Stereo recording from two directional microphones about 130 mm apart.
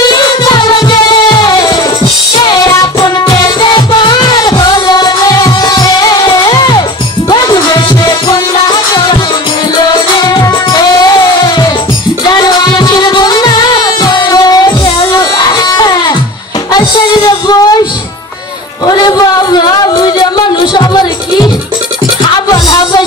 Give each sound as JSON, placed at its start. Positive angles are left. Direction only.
{"t": 0.1, "sound": "music", "side_deg": 35}
{"t": 10.3, "sound": "music", "side_deg": 30}
{"t": 18.9, "sound": "a sound", "side_deg": 30}
{"t": 22.5, "sound": "music", "side_deg": 30}